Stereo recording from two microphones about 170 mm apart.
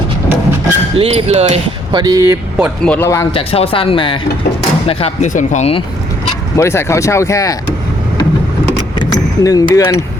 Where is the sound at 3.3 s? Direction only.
35° left (ahead or behind).